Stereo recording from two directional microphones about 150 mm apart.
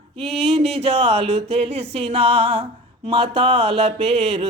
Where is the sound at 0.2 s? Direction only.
40° right (ahead or behind).